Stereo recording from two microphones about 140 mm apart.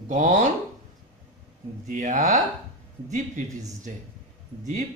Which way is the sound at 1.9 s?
65° right (ahead or behind).